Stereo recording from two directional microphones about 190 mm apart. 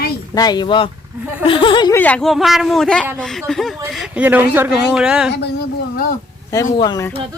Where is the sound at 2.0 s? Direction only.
5° left (ahead or behind).